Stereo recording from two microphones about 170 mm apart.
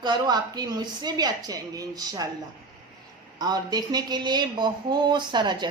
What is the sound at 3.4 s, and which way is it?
A woman's voice, 25° right (ahead or behind).